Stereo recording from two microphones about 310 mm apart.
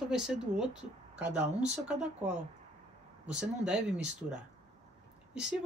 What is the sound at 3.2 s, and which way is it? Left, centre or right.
Speech, centre.